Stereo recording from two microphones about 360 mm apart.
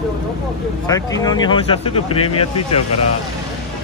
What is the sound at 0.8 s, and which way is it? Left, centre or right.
Speech, centre.